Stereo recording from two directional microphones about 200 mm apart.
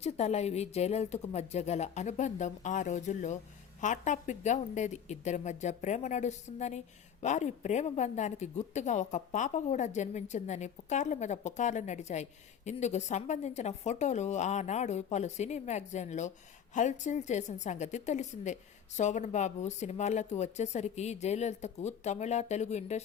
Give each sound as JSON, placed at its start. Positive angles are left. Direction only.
{"t": 0.0, "sound": "a woman's voice", "side_deg": 35}